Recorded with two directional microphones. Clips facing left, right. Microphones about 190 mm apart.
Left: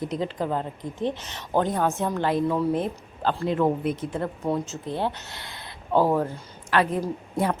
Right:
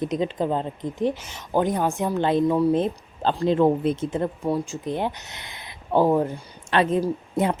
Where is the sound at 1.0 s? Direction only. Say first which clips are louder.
Right 3 dB; 10° right (ahead or behind).